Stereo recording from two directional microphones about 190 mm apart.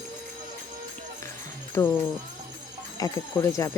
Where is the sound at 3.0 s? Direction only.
15° left (ahead or behind).